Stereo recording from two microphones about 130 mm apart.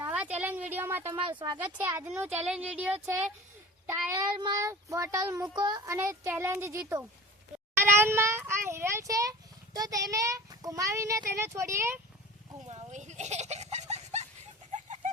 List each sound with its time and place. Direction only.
0.0 s speech: 10° right (ahead or behind)
1.3 s child singing: 35° right (ahead or behind)
1.5 s speech: 15° right (ahead or behind)
4.4 s child singing: 35° right (ahead or behind)
4.6 s speech: 25° right (ahead or behind)
5.9 s speech: 20° right (ahead or behind)
12.6 s a sound: 55° right (ahead or behind)